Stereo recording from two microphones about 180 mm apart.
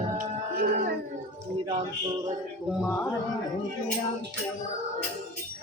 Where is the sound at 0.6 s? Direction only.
55° right (ahead or behind).